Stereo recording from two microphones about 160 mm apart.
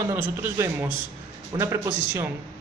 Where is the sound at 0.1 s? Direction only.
20° right (ahead or behind).